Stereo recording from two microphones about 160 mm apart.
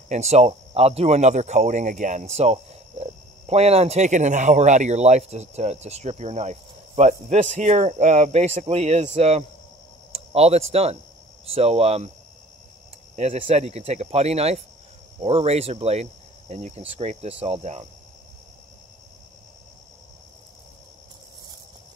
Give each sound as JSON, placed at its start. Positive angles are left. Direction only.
{"t": 0.1, "sound": "speech", "side_deg": -40}
{"t": 13.1, "sound": "speech", "side_deg": -40}